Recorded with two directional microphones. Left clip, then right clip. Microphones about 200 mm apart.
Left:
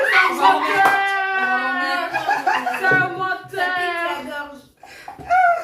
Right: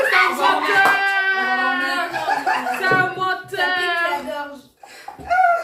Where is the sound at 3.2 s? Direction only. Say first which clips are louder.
Right 1 dB; 50° right (ahead or behind).